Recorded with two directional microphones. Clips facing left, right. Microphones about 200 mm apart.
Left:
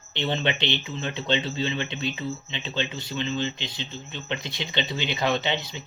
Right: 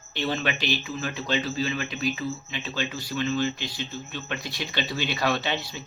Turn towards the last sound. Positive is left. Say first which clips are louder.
# left 1 dB
turn(degrees=20)  # may be behind; listen again after turning